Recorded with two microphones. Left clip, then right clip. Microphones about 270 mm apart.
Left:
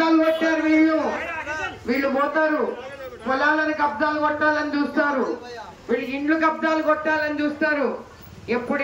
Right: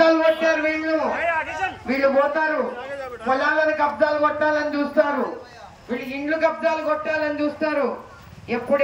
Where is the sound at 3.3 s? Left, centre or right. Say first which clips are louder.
Right 1 dB; centre.